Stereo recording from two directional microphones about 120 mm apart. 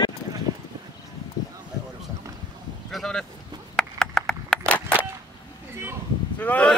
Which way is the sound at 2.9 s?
5° left (ahead or behind).